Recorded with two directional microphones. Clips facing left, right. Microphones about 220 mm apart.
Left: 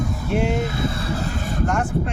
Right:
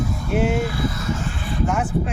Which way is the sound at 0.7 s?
30° left (ahead or behind).